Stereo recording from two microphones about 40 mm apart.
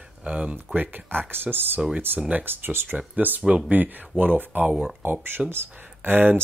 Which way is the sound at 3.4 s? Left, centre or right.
Right.